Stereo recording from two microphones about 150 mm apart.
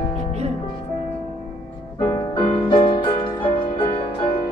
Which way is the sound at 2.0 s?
30° left (ahead or behind).